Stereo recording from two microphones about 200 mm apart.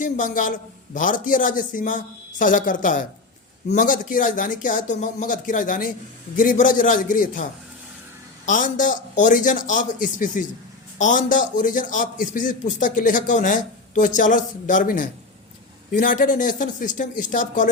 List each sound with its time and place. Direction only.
0.0 s a man's voice: 40° left (ahead or behind)
8.4 s a man's voice: 40° left (ahead or behind)